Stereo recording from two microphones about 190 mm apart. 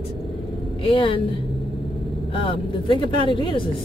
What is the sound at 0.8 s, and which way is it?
Speech, 25° left (ahead or behind).